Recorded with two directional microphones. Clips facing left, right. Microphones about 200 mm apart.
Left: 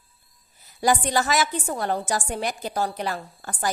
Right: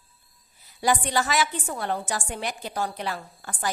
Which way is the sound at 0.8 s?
40° left (ahead or behind).